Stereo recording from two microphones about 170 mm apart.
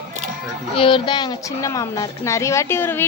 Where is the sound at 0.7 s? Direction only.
30° left (ahead or behind).